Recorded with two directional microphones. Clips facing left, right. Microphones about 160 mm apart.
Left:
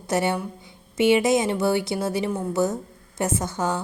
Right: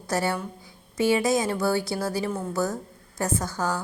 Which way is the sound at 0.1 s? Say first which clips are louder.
Left 3 dB; 20° left (ahead or behind).